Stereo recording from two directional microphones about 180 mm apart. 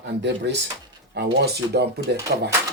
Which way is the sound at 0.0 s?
70° right (ahead or behind).